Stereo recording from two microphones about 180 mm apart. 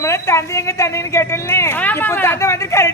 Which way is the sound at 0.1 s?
15° left (ahead or behind).